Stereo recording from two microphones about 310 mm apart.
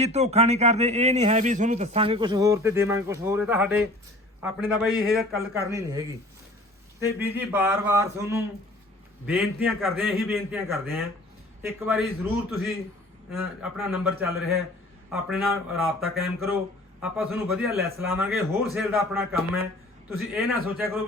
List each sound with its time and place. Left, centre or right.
0.0 s a man's voice: right